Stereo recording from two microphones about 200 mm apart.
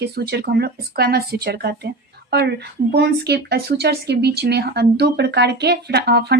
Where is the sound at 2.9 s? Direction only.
55° right (ahead or behind).